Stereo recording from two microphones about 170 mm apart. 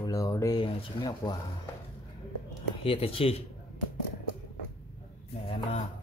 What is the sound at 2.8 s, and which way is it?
Speech, 35° left (ahead or behind).